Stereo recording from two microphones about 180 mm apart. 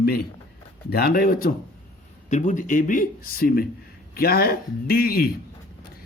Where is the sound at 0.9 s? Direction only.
60° left (ahead or behind).